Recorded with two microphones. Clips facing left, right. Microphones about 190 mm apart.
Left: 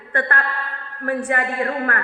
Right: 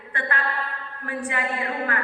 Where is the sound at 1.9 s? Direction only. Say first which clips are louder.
Left 2 dB; 50° left (ahead or behind).